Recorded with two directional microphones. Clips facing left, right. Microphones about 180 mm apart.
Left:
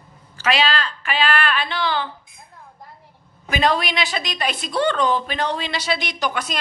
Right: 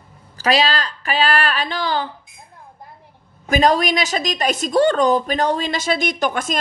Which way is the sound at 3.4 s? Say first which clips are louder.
Right 4 dB; 45° right (ahead or behind).